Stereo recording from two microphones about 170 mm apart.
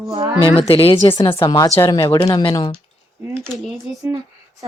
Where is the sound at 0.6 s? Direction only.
35° left (ahead or behind).